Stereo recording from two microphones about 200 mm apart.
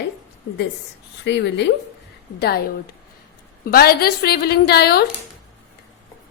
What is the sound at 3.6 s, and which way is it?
A woman's voice, 50° left (ahead or behind).